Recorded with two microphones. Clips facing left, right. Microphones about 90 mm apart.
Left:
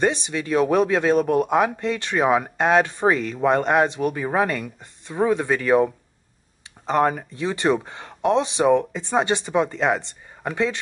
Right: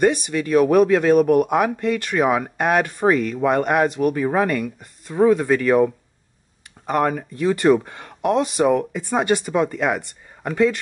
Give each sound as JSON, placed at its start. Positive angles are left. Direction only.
{"t": 0.0, "sound": "speech", "side_deg": 25}
{"t": 6.9, "sound": "speech", "side_deg": 25}